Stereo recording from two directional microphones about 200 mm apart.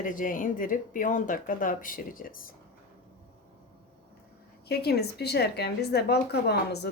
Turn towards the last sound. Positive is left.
turn(degrees=55)  # may be behind; listen again after turning